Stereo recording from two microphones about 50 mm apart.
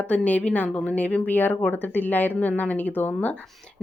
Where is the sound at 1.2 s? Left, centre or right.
Left.